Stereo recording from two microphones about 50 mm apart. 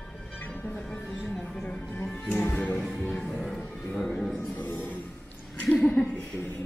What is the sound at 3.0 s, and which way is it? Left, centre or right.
Music, left.